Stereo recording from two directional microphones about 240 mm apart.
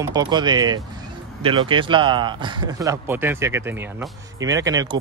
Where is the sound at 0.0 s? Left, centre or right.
Centre.